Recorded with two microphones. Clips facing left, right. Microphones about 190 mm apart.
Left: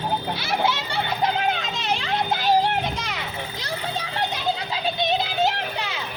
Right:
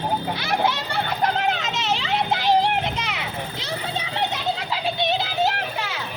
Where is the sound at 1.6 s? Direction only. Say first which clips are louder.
Right 1 dB; 85° right.